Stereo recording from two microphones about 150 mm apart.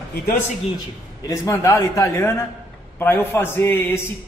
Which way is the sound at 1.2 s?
20° left (ahead or behind).